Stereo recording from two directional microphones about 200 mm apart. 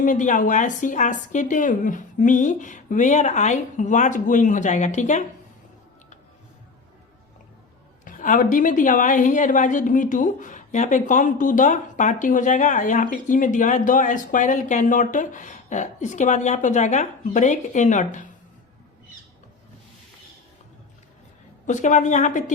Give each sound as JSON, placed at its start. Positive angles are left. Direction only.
{"t": 0.0, "sound": "a woman's voice", "side_deg": 40}
{"t": 8.0, "sound": "a woman's voice", "side_deg": 40}
{"t": 21.7, "sound": "a woman's voice", "side_deg": 35}